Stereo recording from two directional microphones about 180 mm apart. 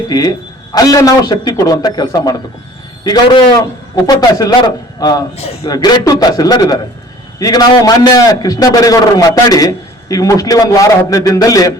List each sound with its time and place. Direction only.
0.1 s a man's voice: 20° left (ahead or behind)